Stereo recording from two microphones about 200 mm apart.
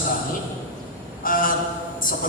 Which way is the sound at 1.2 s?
45° left (ahead or behind).